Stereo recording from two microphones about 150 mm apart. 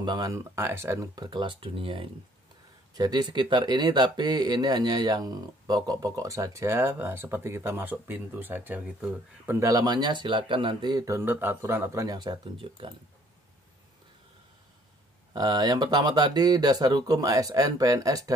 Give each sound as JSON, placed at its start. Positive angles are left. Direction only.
{"t": 0.0, "sound": "speech", "side_deg": -25}
{"t": 9.6, "sound": "speech", "side_deg": -25}
{"t": 15.3, "sound": "speech", "side_deg": -25}